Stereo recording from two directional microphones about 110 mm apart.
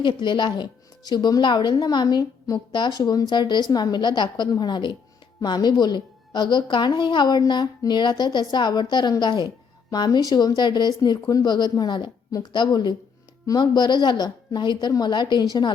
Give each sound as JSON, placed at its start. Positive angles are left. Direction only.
{"t": 0.0, "sound": "speech", "side_deg": 45}